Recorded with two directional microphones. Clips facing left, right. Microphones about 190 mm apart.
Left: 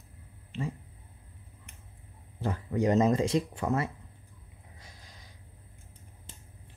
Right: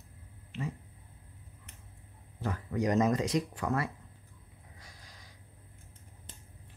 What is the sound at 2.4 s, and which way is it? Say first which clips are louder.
Speech: left 4 dB; 25° left (ahead or behind).